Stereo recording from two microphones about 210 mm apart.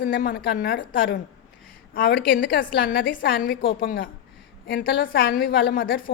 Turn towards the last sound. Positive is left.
turn(degrees=45)  # may be behind; listen again after turning